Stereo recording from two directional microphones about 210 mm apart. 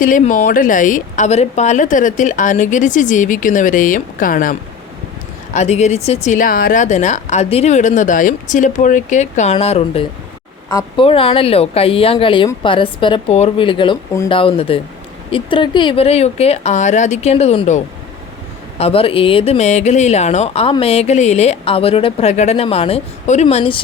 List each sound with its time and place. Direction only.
0.0 s speech: 40° left (ahead or behind)
5.5 s speech: 30° left (ahead or behind)
10.7 s speech: 15° left (ahead or behind)
11.0 s speech: 25° left (ahead or behind)